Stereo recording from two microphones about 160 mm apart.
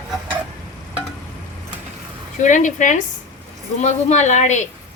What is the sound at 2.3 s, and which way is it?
A woman's voice, 50° left (ahead or behind).